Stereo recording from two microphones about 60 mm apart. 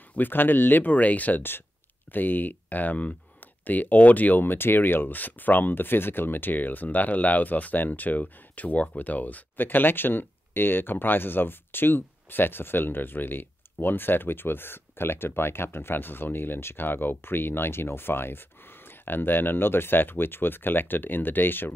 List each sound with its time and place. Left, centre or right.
0.1 s speech: left